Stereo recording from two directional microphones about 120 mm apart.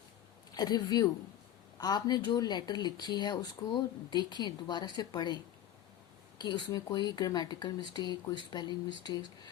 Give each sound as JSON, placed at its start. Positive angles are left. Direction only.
{"t": 0.5, "sound": "speech", "side_deg": 35}
{"t": 6.4, "sound": "speech", "side_deg": 35}